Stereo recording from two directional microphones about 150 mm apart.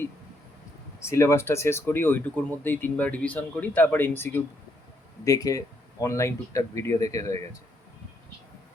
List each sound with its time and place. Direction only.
0.9 s speech: 20° left (ahead or behind)